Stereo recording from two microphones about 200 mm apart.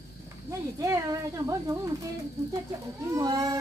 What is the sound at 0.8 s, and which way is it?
Speech, 15° right (ahead or behind).